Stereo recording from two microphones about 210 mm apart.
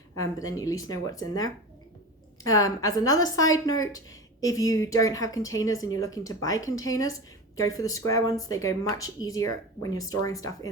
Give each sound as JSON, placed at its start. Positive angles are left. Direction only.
{"t": 0.2, "sound": "a woman's voice", "side_deg": 15}